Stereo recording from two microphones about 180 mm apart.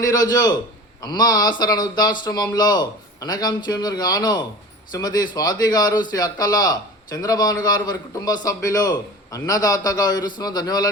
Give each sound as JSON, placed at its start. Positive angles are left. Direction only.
{"t": 0.0, "sound": "a man's voice", "side_deg": 20}